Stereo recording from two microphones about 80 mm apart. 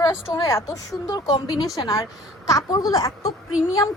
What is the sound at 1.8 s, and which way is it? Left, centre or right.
A woman's voice, left.